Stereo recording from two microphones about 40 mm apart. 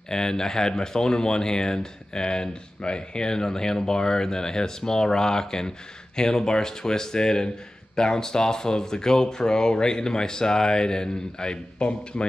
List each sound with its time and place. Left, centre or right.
0.1 s speech: centre